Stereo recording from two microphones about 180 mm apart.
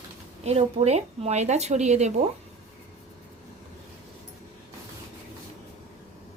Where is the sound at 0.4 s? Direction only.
35° right (ahead or behind).